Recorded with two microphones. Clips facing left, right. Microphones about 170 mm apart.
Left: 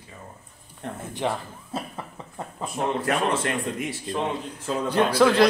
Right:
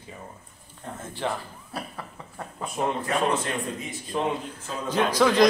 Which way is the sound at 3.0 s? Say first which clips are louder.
Left 1 dB; 90° left.